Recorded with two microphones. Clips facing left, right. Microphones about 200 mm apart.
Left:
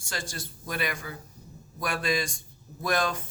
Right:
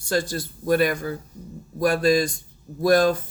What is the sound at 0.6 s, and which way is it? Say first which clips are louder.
Speech: right 13 dB; 45° right (ahead or behind).